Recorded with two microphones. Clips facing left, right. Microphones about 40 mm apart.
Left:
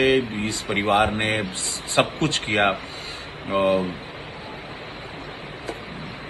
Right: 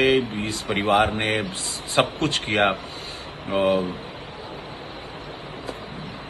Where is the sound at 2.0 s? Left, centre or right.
Centre.